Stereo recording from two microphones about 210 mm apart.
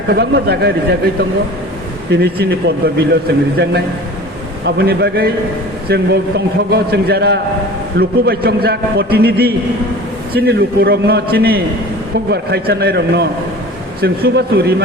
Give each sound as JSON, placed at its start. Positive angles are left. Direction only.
{"t": 0.1, "sound": "a man's voice", "side_deg": -50}
{"t": 2.0, "sound": "a man's voice", "side_deg": -50}
{"t": 4.6, "sound": "a man's voice", "side_deg": -50}